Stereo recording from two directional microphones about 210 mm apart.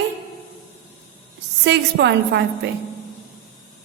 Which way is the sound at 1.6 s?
55° right (ahead or behind).